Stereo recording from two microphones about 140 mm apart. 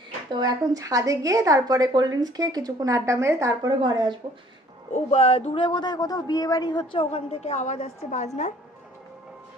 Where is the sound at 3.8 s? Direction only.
30° right (ahead or behind).